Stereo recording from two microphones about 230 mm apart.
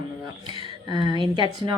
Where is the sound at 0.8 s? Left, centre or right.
Centre.